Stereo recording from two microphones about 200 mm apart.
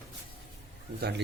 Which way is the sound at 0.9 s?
55° right (ahead or behind).